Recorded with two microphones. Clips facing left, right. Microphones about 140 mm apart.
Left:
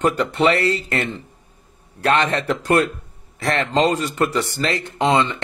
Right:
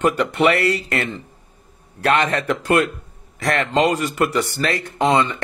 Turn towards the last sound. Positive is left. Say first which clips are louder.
# right 1 dB
turn(degrees=25)  # may be behind; listen again after turning